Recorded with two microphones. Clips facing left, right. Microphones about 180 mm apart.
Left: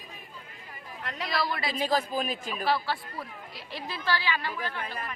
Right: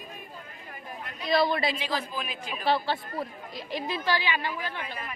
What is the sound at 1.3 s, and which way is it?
Speech, 20° right (ahead or behind).